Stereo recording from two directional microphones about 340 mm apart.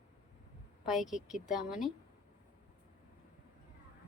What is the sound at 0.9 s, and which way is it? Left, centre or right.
A woman's voice, centre.